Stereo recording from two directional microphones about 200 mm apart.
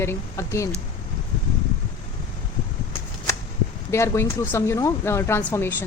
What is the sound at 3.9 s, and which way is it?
Speech, 15° left (ahead or behind).